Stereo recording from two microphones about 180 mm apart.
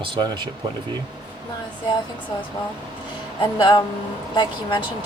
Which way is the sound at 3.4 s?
25° left (ahead or behind).